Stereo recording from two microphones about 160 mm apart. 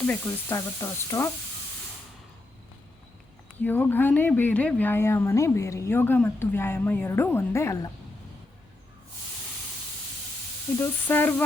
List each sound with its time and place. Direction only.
0.1 s a woman's voice: 15° left (ahead or behind)
3.6 s a woman's voice: 10° left (ahead or behind)
10.8 s a woman's voice: 10° left (ahead or behind)